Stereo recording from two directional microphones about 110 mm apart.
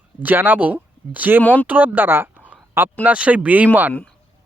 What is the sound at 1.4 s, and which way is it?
Speech, 15° left (ahead or behind).